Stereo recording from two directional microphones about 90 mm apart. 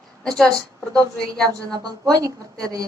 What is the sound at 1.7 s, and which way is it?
Speech, 45° right (ahead or behind).